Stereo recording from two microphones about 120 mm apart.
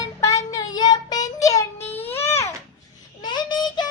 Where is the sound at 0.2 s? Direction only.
25° left (ahead or behind).